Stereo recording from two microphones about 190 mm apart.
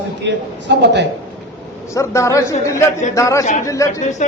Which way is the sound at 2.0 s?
15° left (ahead or behind).